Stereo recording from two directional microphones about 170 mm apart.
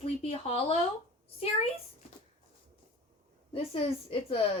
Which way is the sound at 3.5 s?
35° left (ahead or behind).